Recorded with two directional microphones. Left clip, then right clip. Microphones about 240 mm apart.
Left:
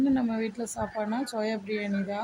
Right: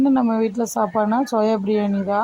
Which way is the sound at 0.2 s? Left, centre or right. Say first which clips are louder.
Right 11 dB; right.